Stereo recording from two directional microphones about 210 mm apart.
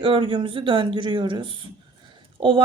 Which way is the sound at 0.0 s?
25° right (ahead or behind).